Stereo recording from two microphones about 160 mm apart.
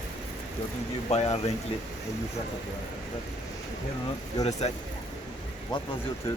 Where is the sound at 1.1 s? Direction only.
40° left (ahead or behind).